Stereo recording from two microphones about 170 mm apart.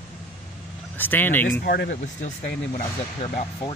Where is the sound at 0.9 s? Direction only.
10° left (ahead or behind).